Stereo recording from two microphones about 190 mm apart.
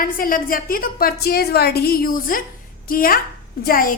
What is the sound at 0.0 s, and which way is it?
A woman's voice, 45° left (ahead or behind).